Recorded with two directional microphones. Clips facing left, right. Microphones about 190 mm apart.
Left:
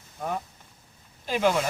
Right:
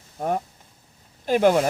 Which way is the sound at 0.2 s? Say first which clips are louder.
Right 6 dB; 45° right (ahead or behind).